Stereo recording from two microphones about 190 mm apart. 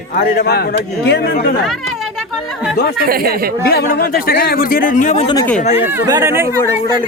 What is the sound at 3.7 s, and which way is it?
Speech, 55° left (ahead or behind).